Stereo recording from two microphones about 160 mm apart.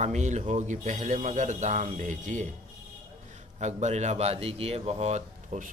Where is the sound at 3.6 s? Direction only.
45° right (ahead or behind).